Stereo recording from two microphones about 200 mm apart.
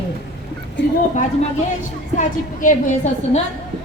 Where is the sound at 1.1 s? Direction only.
35° left (ahead or behind).